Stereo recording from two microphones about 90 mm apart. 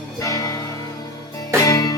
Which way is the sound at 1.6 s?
40° left (ahead or behind).